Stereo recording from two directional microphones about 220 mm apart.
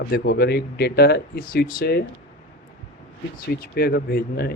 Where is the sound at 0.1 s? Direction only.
45° left (ahead or behind).